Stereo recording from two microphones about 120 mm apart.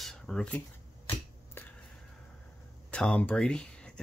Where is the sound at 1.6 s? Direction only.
15° left (ahead or behind).